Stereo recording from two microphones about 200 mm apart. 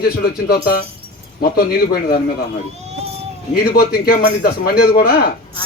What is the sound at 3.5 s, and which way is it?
A man's voice, 50° left (ahead or behind).